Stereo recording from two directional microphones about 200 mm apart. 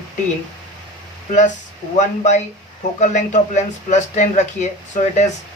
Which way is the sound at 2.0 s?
35° left (ahead or behind).